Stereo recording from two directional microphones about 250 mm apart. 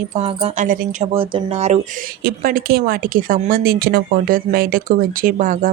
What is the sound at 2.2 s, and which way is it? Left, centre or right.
Speech, right.